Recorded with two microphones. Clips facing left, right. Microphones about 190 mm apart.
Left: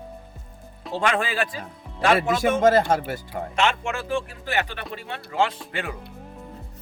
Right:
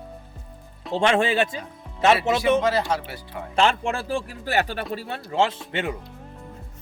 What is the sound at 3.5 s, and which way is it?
Speech, 35° right (ahead or behind).